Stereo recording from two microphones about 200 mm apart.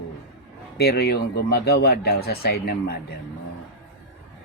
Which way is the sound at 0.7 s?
55° left (ahead or behind).